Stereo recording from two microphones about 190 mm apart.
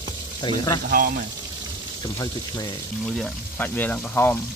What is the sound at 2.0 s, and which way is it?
Speech, 20° left (ahead or behind).